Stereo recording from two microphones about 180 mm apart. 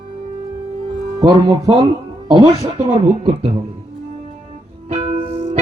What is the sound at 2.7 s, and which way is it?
Speech, 35° right (ahead or behind).